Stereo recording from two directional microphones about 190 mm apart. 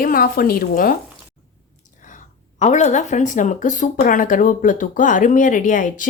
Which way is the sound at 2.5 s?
40° left (ahead or behind).